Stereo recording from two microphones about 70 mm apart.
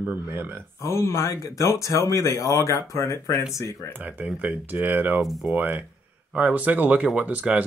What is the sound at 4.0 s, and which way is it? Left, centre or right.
Speech, centre.